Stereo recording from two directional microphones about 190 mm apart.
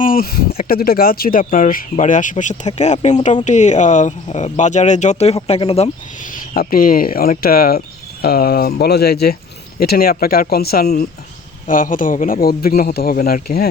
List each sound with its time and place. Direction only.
0.0 s a sound: 50° left (ahead or behind)
0.7 s speech: 50° left (ahead or behind); by 5.9 s 30° left (ahead or behind)
6.5 s speech: 50° left (ahead or behind)